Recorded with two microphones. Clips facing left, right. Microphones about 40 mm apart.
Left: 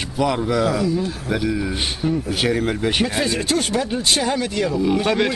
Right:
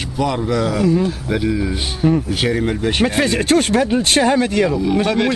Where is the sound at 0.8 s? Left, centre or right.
Right.